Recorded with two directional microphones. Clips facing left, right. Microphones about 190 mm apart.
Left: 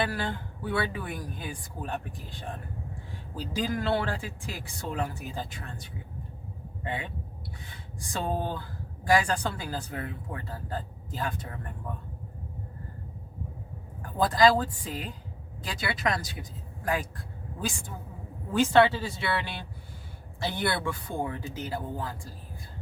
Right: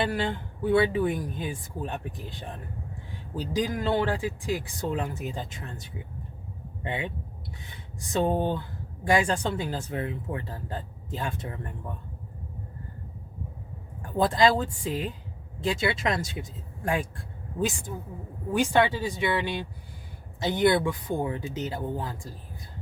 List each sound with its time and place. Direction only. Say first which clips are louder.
0.0 s speech: right 3 dB; 25° right (ahead or behind)
3.3 s speech: right 3 dB; 15° right (ahead or behind)
6.8 s speech: right 3 dB; 20° right (ahead or behind)
8.1 s speech: right 6 dB; 20° right (ahead or behind)
14.2 s speech: even; 25° right (ahead or behind)